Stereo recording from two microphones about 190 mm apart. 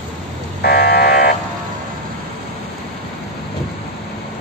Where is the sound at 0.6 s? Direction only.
55° left (ahead or behind).